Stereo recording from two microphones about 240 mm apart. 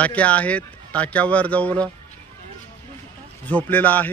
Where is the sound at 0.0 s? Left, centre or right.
Centre.